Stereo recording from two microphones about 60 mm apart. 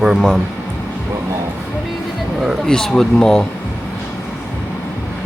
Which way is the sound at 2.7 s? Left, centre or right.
Centre.